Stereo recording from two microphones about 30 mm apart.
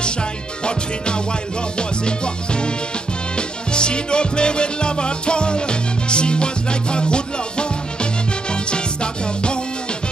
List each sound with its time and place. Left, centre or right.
0.0 s music: left